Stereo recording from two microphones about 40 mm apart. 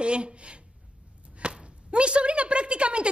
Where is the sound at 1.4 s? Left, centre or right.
Right.